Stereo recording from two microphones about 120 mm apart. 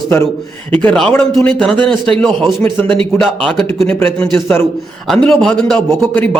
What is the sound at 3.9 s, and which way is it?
A man's voice, 10° left (ahead or behind).